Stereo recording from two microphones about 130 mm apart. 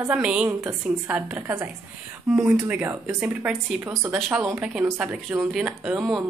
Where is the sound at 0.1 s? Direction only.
10° right (ahead or behind).